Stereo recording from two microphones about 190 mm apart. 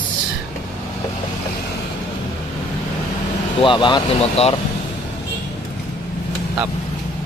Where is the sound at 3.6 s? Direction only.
25° left (ahead or behind).